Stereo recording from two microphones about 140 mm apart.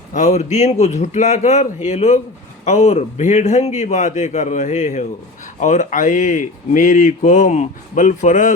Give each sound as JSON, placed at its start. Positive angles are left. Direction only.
{"t": 0.1, "sound": "speech", "side_deg": 55}